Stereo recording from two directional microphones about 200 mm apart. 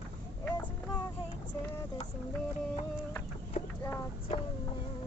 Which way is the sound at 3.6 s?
30° left (ahead or behind).